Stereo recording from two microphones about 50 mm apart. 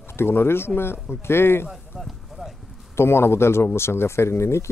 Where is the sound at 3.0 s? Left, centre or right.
Left.